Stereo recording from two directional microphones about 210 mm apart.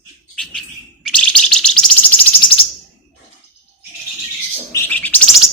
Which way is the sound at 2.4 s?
25° left (ahead or behind).